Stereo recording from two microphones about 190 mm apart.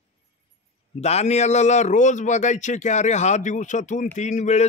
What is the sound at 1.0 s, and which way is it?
Speech, 35° left (ahead or behind).